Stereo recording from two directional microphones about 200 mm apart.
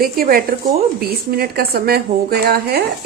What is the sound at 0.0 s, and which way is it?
Speech, 45° right (ahead or behind).